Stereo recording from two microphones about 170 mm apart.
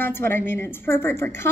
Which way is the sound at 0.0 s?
10° left (ahead or behind).